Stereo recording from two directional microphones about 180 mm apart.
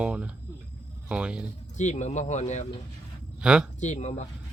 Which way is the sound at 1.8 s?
40° left (ahead or behind).